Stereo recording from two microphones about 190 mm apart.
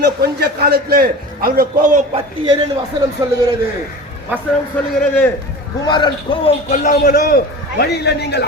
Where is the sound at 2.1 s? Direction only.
25° right (ahead or behind).